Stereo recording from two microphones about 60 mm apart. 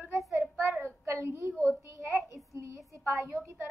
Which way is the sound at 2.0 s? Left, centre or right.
Right.